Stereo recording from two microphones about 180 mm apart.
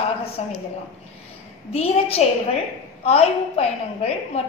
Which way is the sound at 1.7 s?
35° left (ahead or behind).